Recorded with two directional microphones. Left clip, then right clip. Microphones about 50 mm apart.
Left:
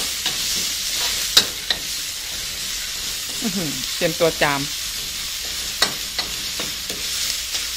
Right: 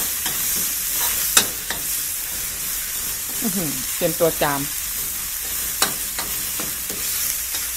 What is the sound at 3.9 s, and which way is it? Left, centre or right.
Stir, centre.